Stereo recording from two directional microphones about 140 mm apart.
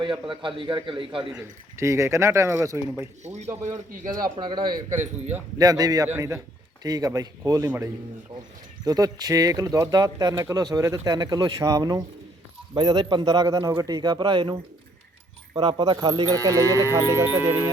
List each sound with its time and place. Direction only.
0.0 s a man's voice: 35° right (ahead or behind)
1.4 s speech: 20° right (ahead or behind)
3.2 s a man's voice: 55° right (ahead or behind)
4.2 s a man's voice: 30° right (ahead or behind)
4.9 s a man's voice: 60° right (ahead or behind)
5.5 s speech: 25° right (ahead or behind)
8.8 s speech: 30° right (ahead or behind)